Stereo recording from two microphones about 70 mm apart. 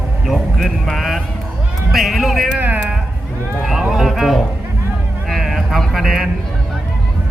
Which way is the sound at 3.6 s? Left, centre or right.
Centre.